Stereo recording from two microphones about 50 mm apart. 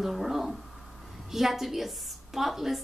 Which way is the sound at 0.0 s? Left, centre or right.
Centre.